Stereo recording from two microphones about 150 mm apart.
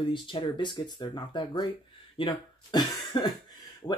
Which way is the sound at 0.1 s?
35° left (ahead or behind).